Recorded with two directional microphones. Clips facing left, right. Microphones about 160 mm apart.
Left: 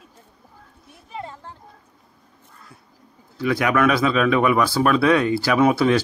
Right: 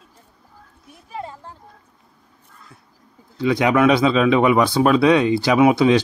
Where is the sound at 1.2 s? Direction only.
15° right (ahead or behind).